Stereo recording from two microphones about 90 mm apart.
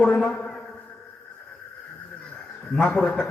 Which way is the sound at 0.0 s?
10° left (ahead or behind).